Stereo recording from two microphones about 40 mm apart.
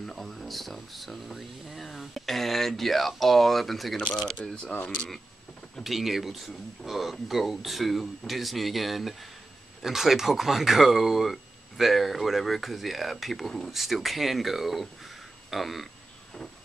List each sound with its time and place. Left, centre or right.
0.0 s speech: centre
4.4 s speech: left
5.9 s speech: centre